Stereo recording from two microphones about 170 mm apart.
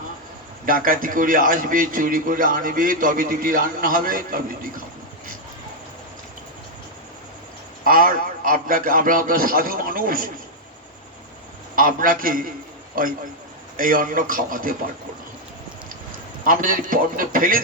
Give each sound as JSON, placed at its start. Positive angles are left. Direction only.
{"t": 0.6, "sound": "a man's voice", "side_deg": -55}
{"t": 7.9, "sound": "a man's voice", "side_deg": -55}
{"t": 11.8, "sound": "a man's voice", "side_deg": -55}
{"t": 13.7, "sound": "a man's voice", "side_deg": -55}
{"t": 16.4, "sound": "a man's voice", "side_deg": -55}